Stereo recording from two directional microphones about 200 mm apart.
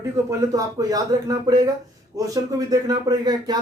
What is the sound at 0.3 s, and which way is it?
Speech, 15° right (ahead or behind).